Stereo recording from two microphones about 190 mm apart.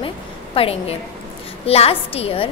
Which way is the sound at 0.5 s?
30° left (ahead or behind).